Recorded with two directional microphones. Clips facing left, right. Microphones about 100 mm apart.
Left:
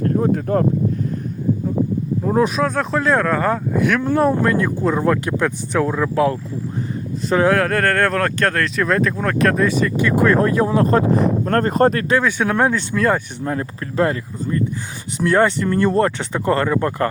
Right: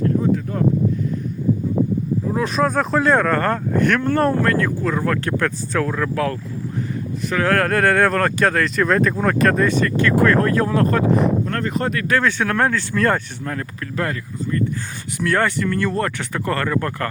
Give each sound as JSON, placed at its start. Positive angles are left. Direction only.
{"t": 0.0, "sound": "speech", "side_deg": 50}
{"t": 2.6, "sound": "speech", "side_deg": 0}
{"t": 7.5, "sound": "speech", "side_deg": 0}
{"t": 11.4, "sound": "speech", "side_deg": 40}
{"t": 12.0, "sound": "speech", "side_deg": 15}
{"t": 13.4, "sound": "speech", "side_deg": 20}